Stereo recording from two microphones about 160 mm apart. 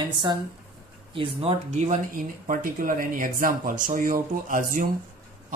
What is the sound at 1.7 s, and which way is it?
Speech, 55° right (ahead or behind).